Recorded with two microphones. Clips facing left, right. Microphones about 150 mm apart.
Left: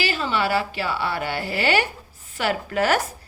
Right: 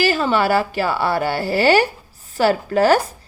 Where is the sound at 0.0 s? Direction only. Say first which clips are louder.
Right 6 dB; 45° right (ahead or behind).